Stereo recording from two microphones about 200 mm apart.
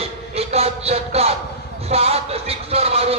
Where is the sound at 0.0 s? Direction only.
30° right (ahead or behind).